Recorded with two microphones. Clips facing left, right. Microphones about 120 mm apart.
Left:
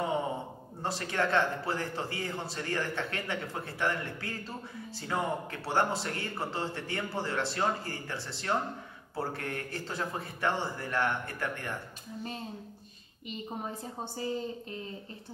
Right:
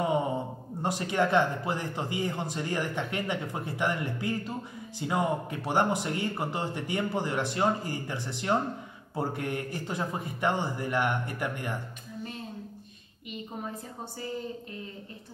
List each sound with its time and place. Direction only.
0.8 s a man's voice: 15° right (ahead or behind)